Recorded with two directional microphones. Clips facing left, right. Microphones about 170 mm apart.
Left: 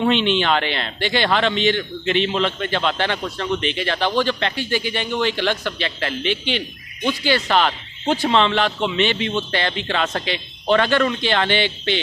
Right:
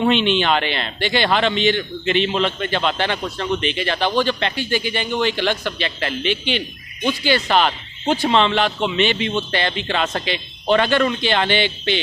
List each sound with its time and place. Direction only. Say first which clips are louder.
0.0 s a man's voice: right 1 dB; 15° right (ahead or behind)